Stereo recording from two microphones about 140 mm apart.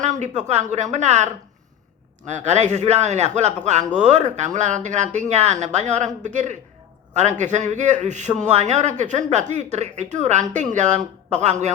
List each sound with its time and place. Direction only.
0.0 s speech: 55° right (ahead or behind)